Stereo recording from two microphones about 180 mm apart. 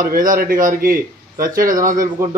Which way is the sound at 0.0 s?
50° right (ahead or behind).